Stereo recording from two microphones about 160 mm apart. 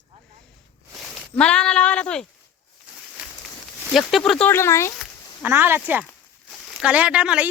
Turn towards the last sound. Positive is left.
turn(degrees=-5)  # may be behind; listen again after turning